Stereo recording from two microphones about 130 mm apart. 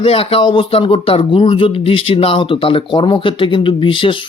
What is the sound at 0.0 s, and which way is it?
Speech, 45° left (ahead or behind).